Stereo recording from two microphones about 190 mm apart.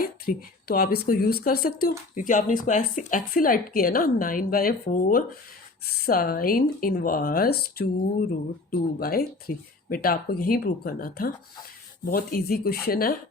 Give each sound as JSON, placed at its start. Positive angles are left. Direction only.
{"t": 0.0, "sound": "speech", "side_deg": 50}